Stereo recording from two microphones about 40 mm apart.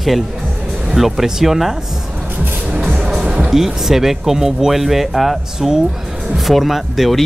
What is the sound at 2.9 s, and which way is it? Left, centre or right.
Music, centre.